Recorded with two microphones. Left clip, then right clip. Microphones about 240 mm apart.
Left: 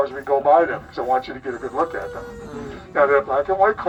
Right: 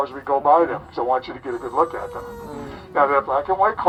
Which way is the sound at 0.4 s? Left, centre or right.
Right.